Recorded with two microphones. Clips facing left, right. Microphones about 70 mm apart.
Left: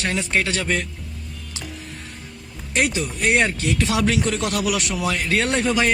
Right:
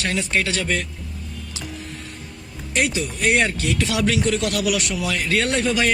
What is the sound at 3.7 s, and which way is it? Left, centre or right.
A man's voice, left.